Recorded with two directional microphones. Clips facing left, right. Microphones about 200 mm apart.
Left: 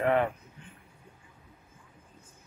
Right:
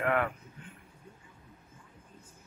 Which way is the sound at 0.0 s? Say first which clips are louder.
Left 4 dB; 25° left (ahead or behind).